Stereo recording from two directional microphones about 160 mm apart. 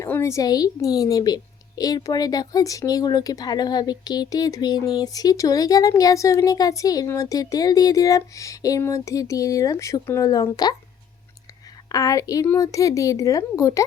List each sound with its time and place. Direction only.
0.0 s a woman's voice: 20° left (ahead or behind)
11.9 s a woman's voice: 20° left (ahead or behind)